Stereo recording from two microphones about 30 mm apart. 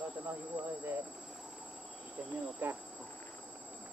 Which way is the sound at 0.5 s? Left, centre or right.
Right.